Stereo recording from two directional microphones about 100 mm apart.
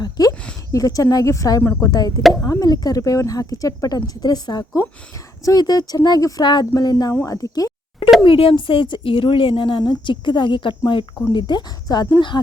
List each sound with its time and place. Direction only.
0.0 s a sound: 40° left (ahead or behind)
0.7 s speech: 35° left (ahead or behind)
1.6 s speech: 25° left (ahead or behind)
1.9 s speech: 40° left (ahead or behind)
7.3 s a sound: 35° left (ahead or behind)
8.2 s speech: 65° left (ahead or behind); by 12.0 s 45° left (ahead or behind)